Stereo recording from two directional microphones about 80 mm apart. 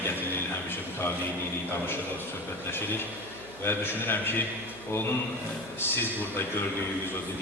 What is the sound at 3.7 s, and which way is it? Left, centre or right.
Speech, left.